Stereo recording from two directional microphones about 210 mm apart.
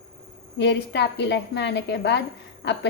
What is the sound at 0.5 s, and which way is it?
A woman's voice, 55° left (ahead or behind).